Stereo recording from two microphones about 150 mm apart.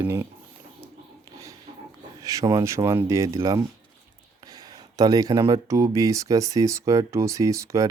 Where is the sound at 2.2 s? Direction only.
20° right (ahead or behind).